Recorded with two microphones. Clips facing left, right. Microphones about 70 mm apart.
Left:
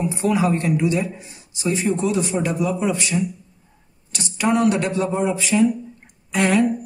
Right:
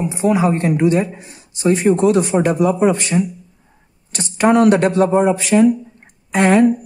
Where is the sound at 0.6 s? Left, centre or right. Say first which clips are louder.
Right 5 dB; right.